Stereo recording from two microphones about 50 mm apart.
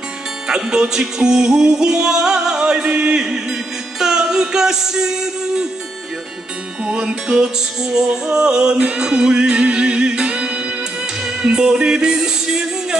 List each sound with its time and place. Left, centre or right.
0.5 s music: centre
6.8 s music: centre